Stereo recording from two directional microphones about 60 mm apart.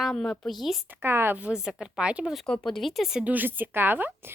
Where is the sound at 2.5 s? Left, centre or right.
Centre.